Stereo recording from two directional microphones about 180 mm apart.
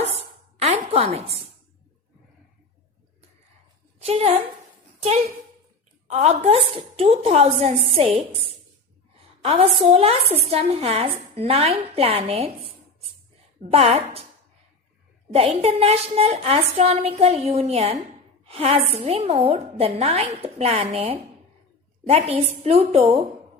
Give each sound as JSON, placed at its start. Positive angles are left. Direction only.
{"t": 0.6, "sound": "a sound", "side_deg": -35}
{"t": 4.0, "sound": "a woman's voice", "side_deg": -35}
{"t": 6.1, "sound": "a woman's voice", "side_deg": -40}
{"t": 9.1, "sound": "a sound", "side_deg": -35}
{"t": 9.9, "sound": "a woman's voice", "side_deg": -35}
{"t": 13.6, "sound": "a woman's voice", "side_deg": -35}
{"t": 15.3, "sound": "a woman's voice", "side_deg": -35}